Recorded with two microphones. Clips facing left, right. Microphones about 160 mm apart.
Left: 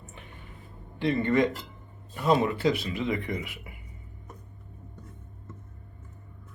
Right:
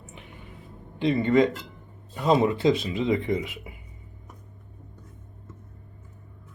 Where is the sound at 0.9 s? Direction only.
20° right (ahead or behind).